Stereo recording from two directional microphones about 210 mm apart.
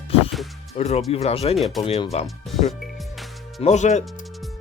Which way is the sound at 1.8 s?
25° left (ahead or behind).